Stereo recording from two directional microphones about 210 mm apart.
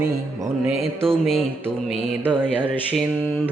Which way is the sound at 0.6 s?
Centre (ahead or behind).